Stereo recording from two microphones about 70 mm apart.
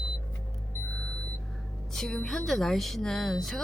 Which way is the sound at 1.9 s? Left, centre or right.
Centre.